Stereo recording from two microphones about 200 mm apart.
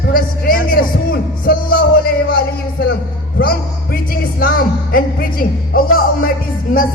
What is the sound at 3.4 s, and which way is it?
A woman's voice, 50° left (ahead or behind).